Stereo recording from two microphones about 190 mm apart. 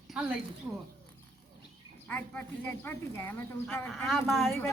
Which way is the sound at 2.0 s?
10° left (ahead or behind).